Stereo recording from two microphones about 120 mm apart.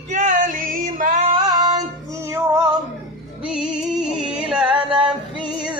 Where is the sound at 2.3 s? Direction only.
25° right (ahead or behind).